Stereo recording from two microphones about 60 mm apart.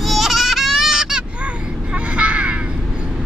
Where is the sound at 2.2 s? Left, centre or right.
Right.